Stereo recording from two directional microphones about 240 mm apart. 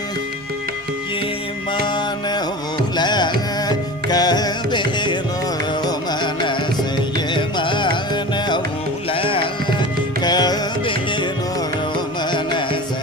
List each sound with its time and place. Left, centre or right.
2.9 s music: centre
12.3 s music: centre